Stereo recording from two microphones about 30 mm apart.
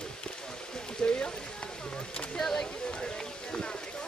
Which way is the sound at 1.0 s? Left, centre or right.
Left.